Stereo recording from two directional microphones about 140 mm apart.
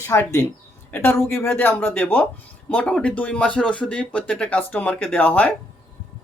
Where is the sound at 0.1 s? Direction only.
20° left (ahead or behind).